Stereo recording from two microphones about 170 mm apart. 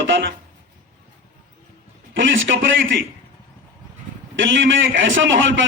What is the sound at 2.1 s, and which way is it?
Speech, 90° right.